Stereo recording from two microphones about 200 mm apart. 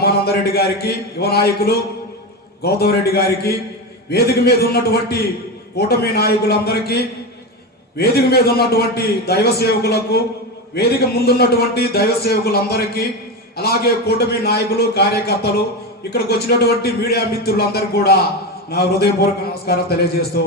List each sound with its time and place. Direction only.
0.0 s a man's voice: 50° left (ahead or behind)